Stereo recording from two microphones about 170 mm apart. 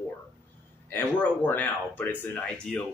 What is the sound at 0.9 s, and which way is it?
Speech, 10° left (ahead or behind).